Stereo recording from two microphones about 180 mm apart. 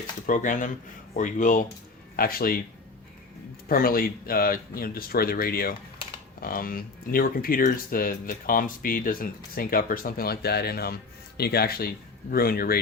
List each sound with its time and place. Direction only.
0.3 s speech: 45° left (ahead or behind)
3.7 s speech: 55° left (ahead or behind)